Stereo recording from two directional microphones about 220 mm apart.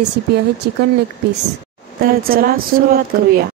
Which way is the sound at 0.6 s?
50° right (ahead or behind).